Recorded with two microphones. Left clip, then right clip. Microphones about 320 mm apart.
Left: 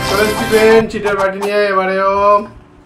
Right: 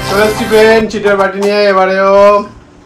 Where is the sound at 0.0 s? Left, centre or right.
Centre.